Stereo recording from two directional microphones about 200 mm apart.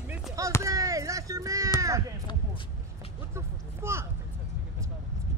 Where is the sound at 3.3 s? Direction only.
15° right (ahead or behind).